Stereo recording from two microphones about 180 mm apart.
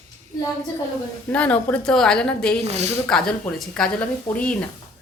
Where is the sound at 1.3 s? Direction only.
5° left (ahead or behind).